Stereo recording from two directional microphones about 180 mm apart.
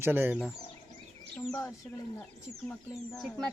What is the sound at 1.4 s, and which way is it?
Speech, 15° left (ahead or behind).